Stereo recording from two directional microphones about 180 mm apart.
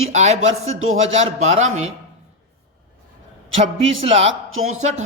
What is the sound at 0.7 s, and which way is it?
Speech, 90° right.